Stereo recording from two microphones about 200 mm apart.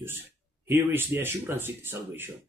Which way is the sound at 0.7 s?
10° right (ahead or behind).